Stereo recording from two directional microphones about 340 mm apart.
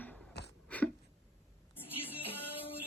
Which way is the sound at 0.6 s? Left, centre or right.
Centre.